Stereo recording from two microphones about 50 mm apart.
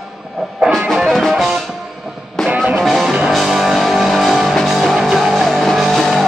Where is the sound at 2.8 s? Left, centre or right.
Centre.